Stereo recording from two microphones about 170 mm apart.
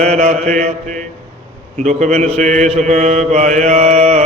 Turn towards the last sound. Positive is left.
turn(degrees=-40)  # may be behind; listen again after turning